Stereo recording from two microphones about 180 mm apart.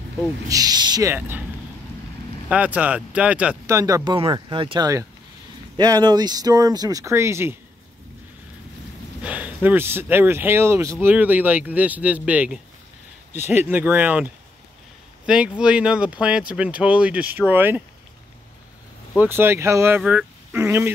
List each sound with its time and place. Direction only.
0.5 s speech: 20° right (ahead or behind)
2.5 s speech: 10° right (ahead or behind)
9.2 s speech: 10° right (ahead or behind)
19.1 s speech: 10° right (ahead or behind)